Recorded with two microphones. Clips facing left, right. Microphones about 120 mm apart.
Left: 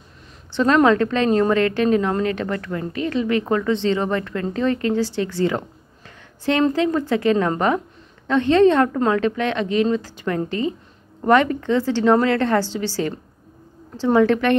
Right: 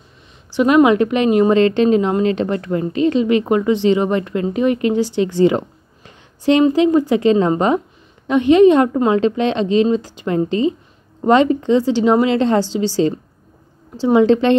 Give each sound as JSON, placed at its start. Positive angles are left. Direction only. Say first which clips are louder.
{"t": 0.6, "sound": "a woman's voice", "louder": "right 4 dB", "side_deg": -15}